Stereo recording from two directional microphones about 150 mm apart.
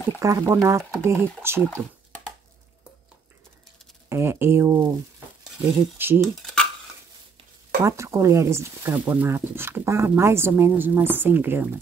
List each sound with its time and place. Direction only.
0.2 s speech: 20° right (ahead or behind)
1.7 s computer keyboard: 10° left (ahead or behind)
4.1 s speech: 15° right (ahead or behind)
5.9 s speech: 15° right (ahead or behind)
6.4 s dishes: 5° left (ahead or behind)
7.8 s speech: 20° right (ahead or behind)